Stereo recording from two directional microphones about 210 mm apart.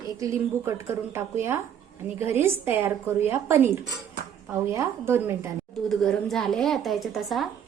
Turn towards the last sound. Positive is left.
turn(degrees=0)  # may be behind; listen again after turning